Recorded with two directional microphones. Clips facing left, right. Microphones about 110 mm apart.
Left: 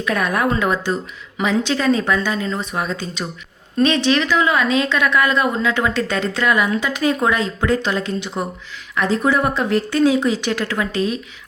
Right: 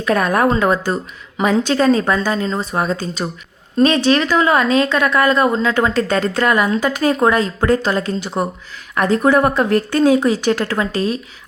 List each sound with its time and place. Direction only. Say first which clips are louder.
0.0 s speech: right 4 dB; 40° right (ahead or behind)